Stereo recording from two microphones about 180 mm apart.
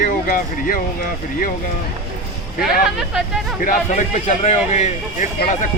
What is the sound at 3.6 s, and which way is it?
Speech, 45° left (ahead or behind).